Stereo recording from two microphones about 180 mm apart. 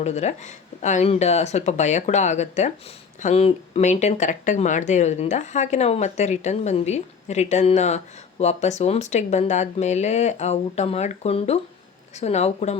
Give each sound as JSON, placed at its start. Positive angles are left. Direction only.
{"t": 0.0, "sound": "speech", "side_deg": 40}